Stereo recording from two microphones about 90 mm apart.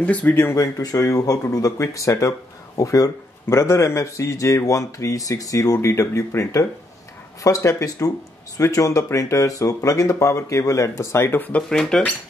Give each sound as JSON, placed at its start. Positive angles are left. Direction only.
{"t": 0.0, "sound": "speech", "side_deg": 15}
{"t": 0.6, "sound": "a man's voice", "side_deg": 40}
{"t": 11.7, "sound": "speech", "side_deg": 5}